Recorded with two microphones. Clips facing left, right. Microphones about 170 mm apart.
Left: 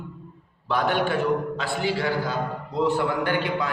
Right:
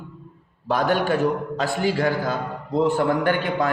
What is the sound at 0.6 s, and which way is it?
Mantra, 45° right (ahead or behind).